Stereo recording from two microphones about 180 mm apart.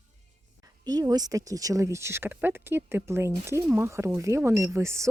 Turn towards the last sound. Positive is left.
turn(degrees=-15)  # may be behind; listen again after turning